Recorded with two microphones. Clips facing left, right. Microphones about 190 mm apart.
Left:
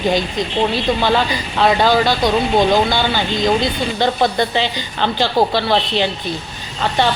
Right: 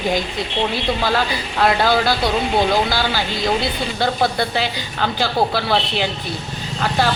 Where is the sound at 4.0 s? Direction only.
5° right (ahead or behind).